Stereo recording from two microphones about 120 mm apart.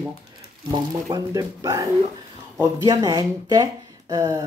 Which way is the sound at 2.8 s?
35° right (ahead or behind).